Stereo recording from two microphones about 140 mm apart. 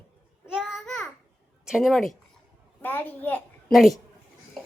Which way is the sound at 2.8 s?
10° left (ahead or behind).